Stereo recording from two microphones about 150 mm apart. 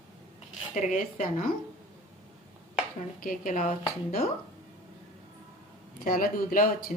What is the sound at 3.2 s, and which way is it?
A woman's voice, 60° left (ahead or behind).